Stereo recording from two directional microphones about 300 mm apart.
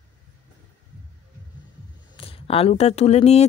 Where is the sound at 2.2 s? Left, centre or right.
Centre.